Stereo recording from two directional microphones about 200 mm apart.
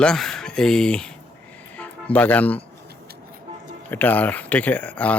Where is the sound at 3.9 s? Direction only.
10° left (ahead or behind).